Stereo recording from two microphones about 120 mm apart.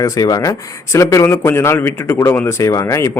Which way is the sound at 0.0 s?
30° left (ahead or behind).